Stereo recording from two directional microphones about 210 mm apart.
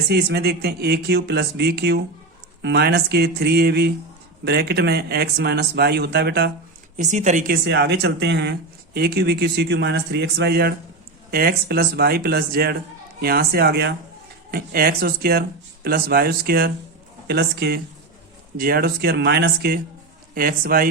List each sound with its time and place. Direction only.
0.1 s speech: 50° right (ahead or behind)
6.9 s speech: 35° right (ahead or behind)